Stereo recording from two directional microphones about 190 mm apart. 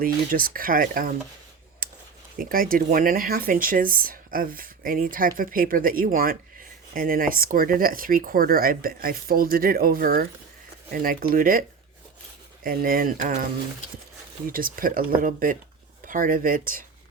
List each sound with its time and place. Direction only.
0.0 s speech: 50° right (ahead or behind)
1.8 s a sound: 50° right (ahead or behind)
2.4 s speech: 50° right (ahead or behind)
12.6 s speech: 50° right (ahead or behind)